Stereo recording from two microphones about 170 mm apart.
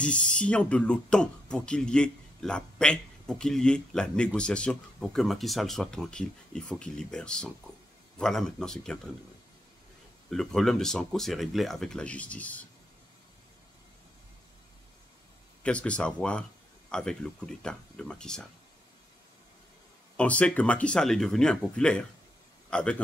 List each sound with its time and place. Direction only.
0.0 s speech: 5° left (ahead or behind)
10.3 s speech: centre (ahead or behind)
15.6 s speech: 5° left (ahead or behind)
20.2 s speech: 5° left (ahead or behind)